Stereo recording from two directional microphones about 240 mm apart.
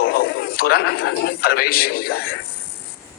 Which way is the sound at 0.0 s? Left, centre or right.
Left.